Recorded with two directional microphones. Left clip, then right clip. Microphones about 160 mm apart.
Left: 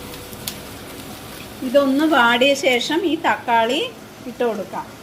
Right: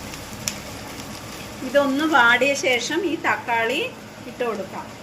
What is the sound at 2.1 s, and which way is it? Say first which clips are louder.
A woman's voice: left 1 dB; 55° left (ahead or behind).